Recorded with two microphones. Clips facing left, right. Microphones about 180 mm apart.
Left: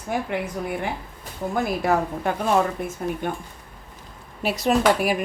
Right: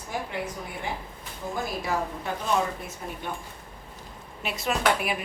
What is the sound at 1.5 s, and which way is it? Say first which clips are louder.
Speech: left 7 dB; 60° left (ahead or behind).